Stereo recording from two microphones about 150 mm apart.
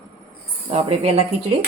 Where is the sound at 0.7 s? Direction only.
45° right (ahead or behind).